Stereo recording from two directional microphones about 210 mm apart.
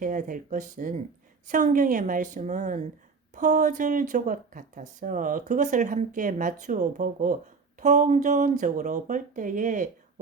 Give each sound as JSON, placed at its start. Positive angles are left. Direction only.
{"t": 0.0, "sound": "speech", "side_deg": -40}